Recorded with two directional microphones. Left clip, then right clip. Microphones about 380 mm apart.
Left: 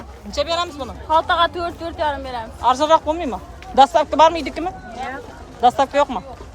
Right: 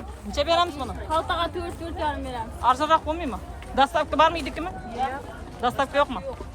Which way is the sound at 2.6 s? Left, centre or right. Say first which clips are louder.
Left 5 dB; centre.